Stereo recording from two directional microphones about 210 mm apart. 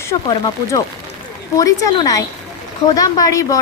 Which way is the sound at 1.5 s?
15° left (ahead or behind).